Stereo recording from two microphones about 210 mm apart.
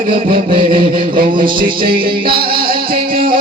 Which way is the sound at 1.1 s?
25° right (ahead or behind).